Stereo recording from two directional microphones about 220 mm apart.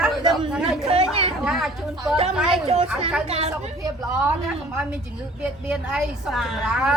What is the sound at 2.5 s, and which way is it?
Speech, 30° right (ahead or behind).